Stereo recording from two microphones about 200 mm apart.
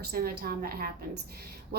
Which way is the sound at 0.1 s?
50° right (ahead or behind).